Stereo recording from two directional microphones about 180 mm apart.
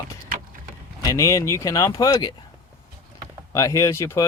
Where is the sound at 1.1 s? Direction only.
15° left (ahead or behind).